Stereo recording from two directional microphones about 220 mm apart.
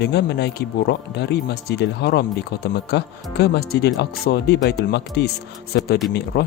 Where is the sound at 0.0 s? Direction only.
50° left (ahead or behind).